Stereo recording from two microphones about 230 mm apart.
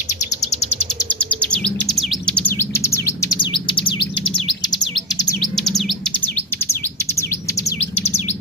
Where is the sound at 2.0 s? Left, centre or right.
Centre.